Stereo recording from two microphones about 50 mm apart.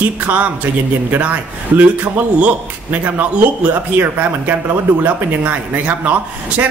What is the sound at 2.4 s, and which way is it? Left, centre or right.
A man's voice, right.